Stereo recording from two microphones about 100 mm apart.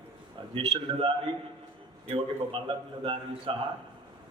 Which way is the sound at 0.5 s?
65° right (ahead or behind).